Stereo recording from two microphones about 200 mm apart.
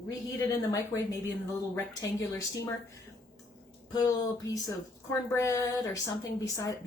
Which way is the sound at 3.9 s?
20° left (ahead or behind).